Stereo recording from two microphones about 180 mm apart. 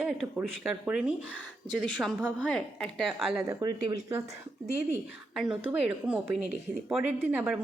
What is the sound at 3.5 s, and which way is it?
Speech, 20° right (ahead or behind).